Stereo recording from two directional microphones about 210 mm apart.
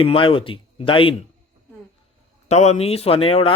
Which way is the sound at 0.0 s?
25° left (ahead or behind).